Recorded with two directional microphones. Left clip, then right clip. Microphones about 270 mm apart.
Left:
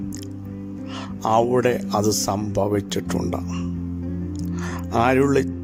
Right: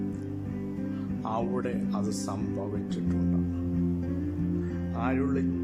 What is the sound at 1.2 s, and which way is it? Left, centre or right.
Speech, left.